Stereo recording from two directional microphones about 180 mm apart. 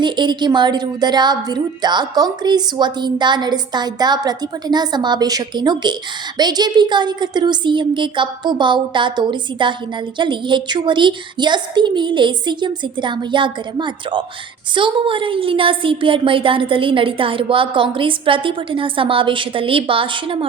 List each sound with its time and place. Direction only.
0.0 s a woman's voice: 25° right (ahead or behind)